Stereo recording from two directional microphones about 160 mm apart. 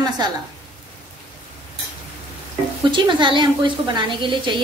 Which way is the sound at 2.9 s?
30° right (ahead or behind).